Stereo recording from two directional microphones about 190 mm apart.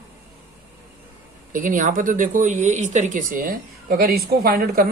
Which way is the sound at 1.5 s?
45° right (ahead or behind).